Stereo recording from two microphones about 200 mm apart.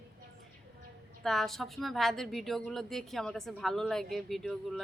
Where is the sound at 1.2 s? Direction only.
Centre (ahead or behind).